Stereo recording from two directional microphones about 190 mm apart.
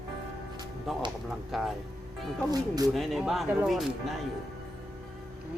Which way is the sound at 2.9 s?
Centre (ahead or behind).